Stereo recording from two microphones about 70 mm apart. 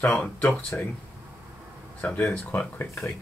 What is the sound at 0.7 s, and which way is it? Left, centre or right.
Speech, left.